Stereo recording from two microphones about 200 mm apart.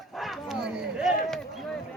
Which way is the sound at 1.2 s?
Centre (ahead or behind).